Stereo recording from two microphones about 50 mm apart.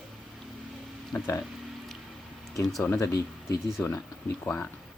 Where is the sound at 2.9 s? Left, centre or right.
Left.